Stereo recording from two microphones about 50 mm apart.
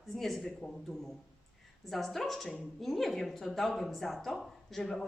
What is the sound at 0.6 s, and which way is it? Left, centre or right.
Speech, left.